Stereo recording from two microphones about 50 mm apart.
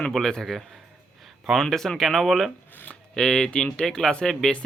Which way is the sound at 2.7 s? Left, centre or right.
Left.